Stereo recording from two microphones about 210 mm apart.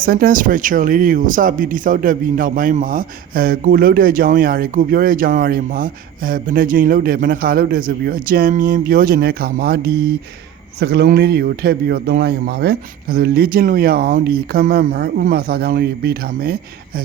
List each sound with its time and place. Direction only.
0.0 s speech: 45° right (ahead or behind)